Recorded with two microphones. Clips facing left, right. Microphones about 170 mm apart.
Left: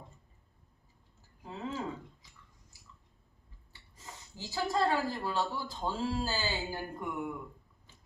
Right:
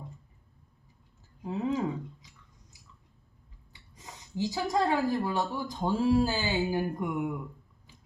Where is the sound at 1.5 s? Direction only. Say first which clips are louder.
Right 9 dB; 15° right (ahead or behind).